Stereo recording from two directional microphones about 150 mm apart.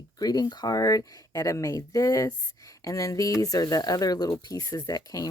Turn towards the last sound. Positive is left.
turn(degrees=25)  # may be behind; listen again after turning